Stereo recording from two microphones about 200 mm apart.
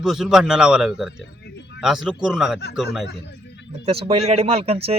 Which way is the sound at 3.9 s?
30° right (ahead or behind).